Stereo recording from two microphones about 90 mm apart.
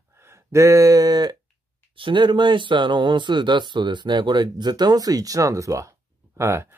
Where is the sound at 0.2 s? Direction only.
30° right (ahead or behind).